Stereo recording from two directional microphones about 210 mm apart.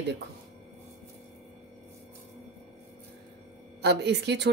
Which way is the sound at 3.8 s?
55° right (ahead or behind).